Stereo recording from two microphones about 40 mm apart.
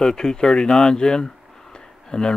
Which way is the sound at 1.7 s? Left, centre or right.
Centre.